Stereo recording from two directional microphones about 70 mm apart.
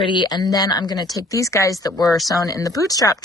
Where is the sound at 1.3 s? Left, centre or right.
Left.